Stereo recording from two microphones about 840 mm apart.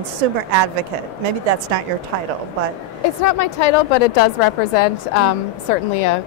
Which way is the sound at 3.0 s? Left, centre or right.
Left.